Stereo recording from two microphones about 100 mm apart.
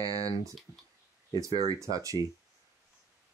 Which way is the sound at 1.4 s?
35° right (ahead or behind).